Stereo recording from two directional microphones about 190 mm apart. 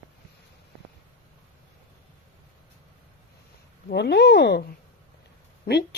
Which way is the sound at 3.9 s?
60° left (ahead or behind).